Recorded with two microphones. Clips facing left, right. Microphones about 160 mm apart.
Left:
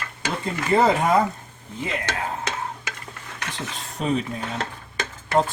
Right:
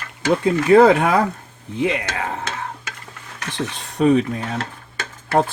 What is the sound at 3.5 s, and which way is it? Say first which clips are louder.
Speech: right 12 dB; 65° right (ahead or behind).